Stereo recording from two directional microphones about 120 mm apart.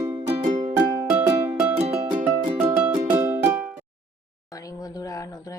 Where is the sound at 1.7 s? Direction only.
65° right (ahead or behind).